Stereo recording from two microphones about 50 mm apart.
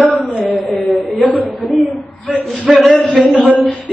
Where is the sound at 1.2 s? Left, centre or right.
Left.